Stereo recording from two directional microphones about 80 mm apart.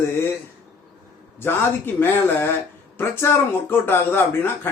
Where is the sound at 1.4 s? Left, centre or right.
Left.